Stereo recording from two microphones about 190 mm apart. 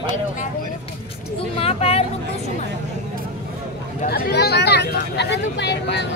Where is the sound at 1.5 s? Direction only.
30° left (ahead or behind).